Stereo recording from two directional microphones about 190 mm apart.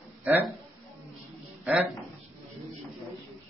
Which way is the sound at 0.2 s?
10° right (ahead or behind).